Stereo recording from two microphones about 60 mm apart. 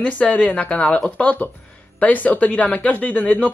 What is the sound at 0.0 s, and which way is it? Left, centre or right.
Speech, left.